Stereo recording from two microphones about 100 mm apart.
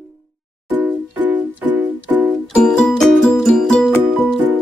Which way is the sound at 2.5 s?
5° left (ahead or behind).